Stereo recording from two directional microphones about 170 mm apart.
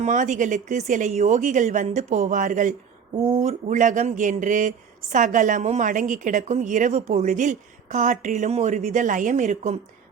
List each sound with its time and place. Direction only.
0.0 s speech: 45° right (ahead or behind)